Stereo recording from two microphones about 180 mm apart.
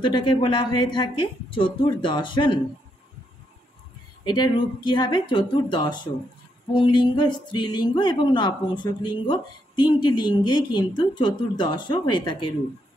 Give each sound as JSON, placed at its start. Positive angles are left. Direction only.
{"t": 0.0, "sound": "speech", "side_deg": 25}
{"t": 4.3, "sound": "speech", "side_deg": 25}